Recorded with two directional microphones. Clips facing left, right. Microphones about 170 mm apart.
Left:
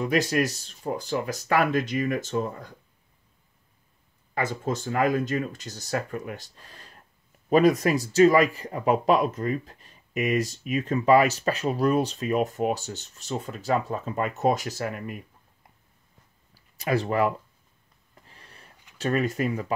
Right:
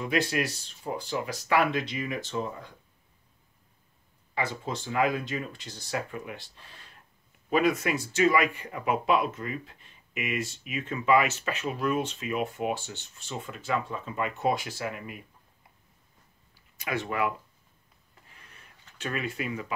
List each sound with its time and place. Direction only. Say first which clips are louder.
0.1 s speech: left 2 dB; 40° left (ahead or behind)
4.4 s speech: left 4 dB; 45° left (ahead or behind)
16.7 s speech: left 6 dB; 35° left (ahead or behind)
18.3 s printer: left 3 dB; 35° left (ahead or behind)
18.9 s speech: left 8 dB; 40° left (ahead or behind)